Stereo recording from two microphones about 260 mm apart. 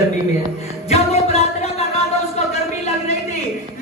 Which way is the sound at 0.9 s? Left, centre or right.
Left.